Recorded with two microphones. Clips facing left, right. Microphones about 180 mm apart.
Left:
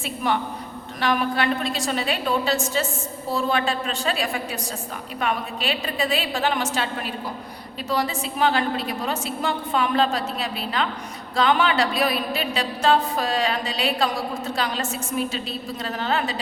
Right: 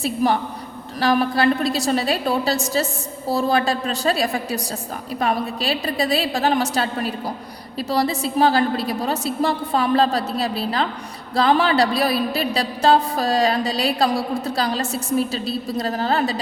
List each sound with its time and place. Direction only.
0.0 s a woman's voice: 35° right (ahead or behind)